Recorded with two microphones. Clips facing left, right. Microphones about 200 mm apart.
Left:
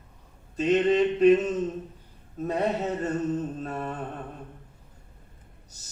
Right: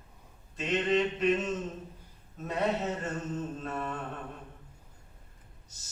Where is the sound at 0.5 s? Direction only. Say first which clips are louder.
Left 7 dB; 35° left (ahead or behind).